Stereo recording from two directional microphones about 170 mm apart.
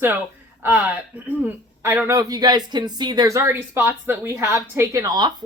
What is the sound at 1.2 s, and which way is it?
Speech, 10° right (ahead or behind).